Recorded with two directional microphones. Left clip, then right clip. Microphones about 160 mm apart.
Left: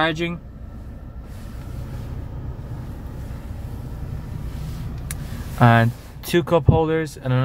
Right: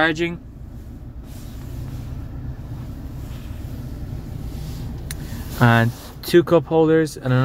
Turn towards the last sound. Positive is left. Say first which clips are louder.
# right 5 dB
turn(degrees=-15)  # may be behind; listen again after turning